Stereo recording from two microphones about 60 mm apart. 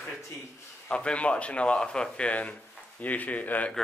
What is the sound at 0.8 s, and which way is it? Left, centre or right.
Speech, centre.